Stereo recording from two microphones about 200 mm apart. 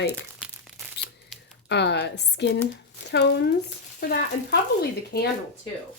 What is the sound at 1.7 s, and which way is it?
A woman's voice, 60° left (ahead or behind).